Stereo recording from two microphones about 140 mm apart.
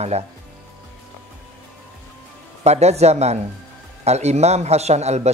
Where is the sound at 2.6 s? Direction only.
50° right (ahead or behind).